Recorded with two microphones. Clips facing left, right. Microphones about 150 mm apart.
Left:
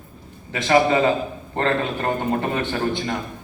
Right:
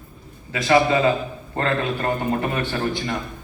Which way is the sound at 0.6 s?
30° left (ahead or behind).